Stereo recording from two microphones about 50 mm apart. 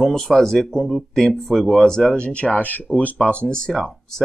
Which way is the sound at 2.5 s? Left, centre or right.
Left.